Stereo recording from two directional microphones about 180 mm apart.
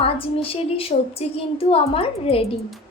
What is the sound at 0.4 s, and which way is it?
A woman's voice, 30° left (ahead or behind).